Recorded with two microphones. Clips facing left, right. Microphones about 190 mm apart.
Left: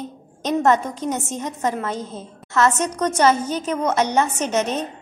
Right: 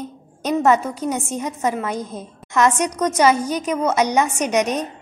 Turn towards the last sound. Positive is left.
turn(degrees=-15)  # may be behind; listen again after turning